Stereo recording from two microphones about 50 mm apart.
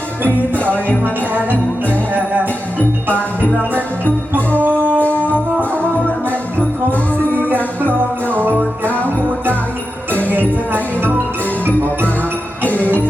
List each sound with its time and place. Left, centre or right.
0.7 s music: right
2.7 s music: left
4.4 s music: right
5.0 s music: left
6.6 s music: left
7.4 s music: right
8.3 s jingle bell: right
10.7 s music: right
12.6 s music: left